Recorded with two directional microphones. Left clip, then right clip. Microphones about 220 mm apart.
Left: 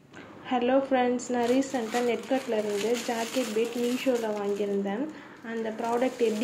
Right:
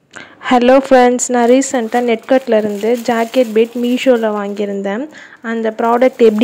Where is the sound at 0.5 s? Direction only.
50° right (ahead or behind).